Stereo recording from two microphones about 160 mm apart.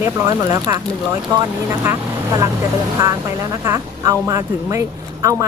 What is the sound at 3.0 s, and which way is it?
Speech, 15° right (ahead or behind).